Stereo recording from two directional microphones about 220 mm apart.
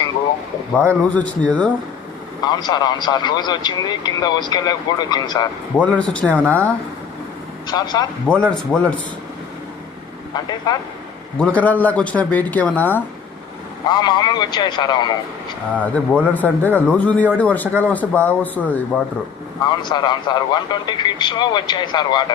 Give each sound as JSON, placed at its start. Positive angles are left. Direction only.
{"t": 0.7, "sound": "speech", "side_deg": 5}
{"t": 2.4, "sound": "speech", "side_deg": 20}
{"t": 5.7, "sound": "speech", "side_deg": 5}
{"t": 6.3, "sound": "a woman's voice", "side_deg": -5}
{"t": 7.7, "sound": "speech", "side_deg": 20}
{"t": 8.3, "sound": "speech", "side_deg": 5}
{"t": 10.3, "sound": "speech", "side_deg": 20}
{"t": 11.3, "sound": "speech", "side_deg": 5}
{"t": 13.8, "sound": "speech", "side_deg": 20}
{"t": 15.7, "sound": "speech", "side_deg": 5}
{"t": 19.8, "sound": "speech", "side_deg": 20}